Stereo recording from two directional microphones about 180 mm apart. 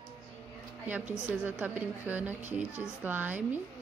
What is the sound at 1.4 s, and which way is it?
A woman's voice, 10° right (ahead or behind).